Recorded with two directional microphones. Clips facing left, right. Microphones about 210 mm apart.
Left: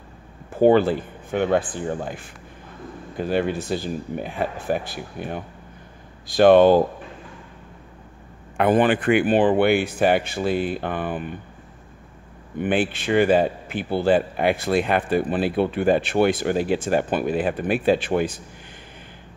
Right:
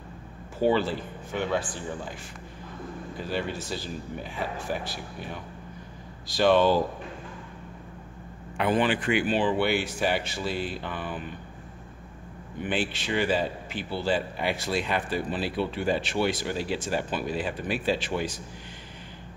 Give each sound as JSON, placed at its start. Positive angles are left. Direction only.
{"t": 0.6, "sound": "speech", "side_deg": 55}
{"t": 8.5, "sound": "speech", "side_deg": 50}
{"t": 12.5, "sound": "speech", "side_deg": 55}